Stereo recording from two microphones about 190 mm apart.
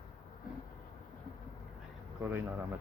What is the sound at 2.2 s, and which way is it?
Speech, 10° right (ahead or behind).